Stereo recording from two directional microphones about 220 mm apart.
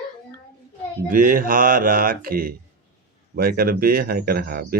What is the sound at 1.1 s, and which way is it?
Speech, 40° right (ahead or behind).